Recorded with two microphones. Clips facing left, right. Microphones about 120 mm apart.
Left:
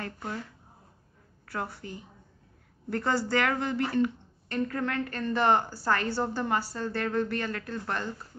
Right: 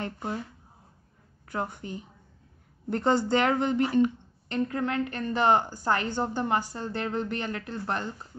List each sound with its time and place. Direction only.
0.0 s speech: 20° right (ahead or behind)
1.5 s speech: 20° right (ahead or behind)